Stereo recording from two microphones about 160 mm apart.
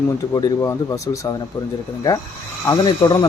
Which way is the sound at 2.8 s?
25° left (ahead or behind).